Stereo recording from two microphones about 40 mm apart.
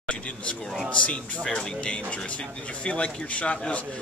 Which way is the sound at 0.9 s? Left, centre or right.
Left.